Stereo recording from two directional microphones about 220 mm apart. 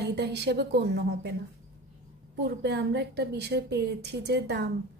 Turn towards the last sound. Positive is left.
turn(degrees=-50)  # may be behind; listen again after turning